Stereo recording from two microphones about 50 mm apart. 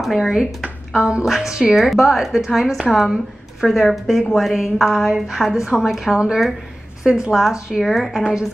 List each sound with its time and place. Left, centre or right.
0.0 s a woman's voice: centre
7.8 s a woman's voice: centre